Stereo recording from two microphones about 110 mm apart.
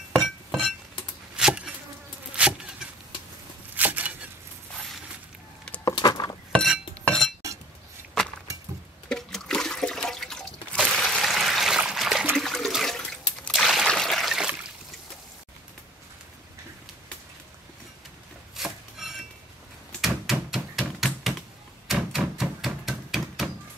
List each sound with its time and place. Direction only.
0.1 s music: 5° left (ahead or behind)
1.3 s insect: 10° right (ahead or behind)
3.7 s a sound: 15° right (ahead or behind)
5.9 s a sound: 35° left (ahead or behind)
6.5 s chink: 5° left (ahead or behind)
9.1 s toilet flush: 5° left (ahead or behind)
10.9 s trickle: centre (ahead or behind)
12.4 s toilet flush: centre (ahead or behind)
13.5 s a sound: 5° right (ahead or behind)
18.6 s chopping: centre (ahead or behind)
20.0 s typewriter: 5° right (ahead or behind)
22.1 s a sound: 5° right (ahead or behind)